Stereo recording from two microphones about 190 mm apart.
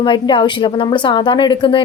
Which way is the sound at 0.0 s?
25° left (ahead or behind).